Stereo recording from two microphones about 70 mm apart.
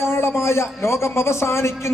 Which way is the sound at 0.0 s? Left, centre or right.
Left.